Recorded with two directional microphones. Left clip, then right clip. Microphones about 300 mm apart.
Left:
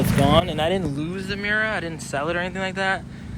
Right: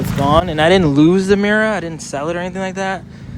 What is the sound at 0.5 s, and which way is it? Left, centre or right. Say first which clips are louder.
Speech: right 11 dB; right.